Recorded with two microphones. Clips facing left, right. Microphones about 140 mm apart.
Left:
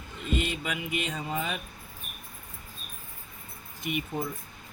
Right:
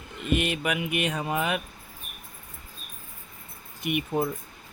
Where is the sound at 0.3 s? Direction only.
70° right (ahead or behind).